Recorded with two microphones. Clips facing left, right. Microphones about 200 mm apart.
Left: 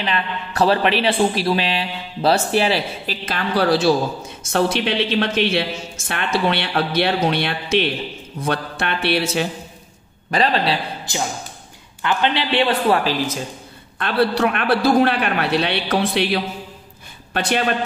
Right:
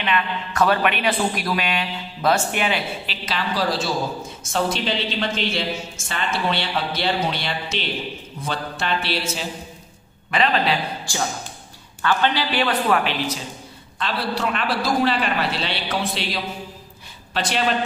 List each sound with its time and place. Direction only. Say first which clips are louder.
0.0 s a man's voice: even; 35° left (ahead or behind)
3.3 s a woman's voice: left 5 dB; 60° left (ahead or behind)
10.3 s a man's voice: left 2 dB; 35° left (ahead or behind)
11.1 s speech: left 4 dB; 20° left (ahead or behind); by 13.4 s 40° left (ahead or behind)
13.9 s a woman's voice: left 7 dB; 60° left (ahead or behind)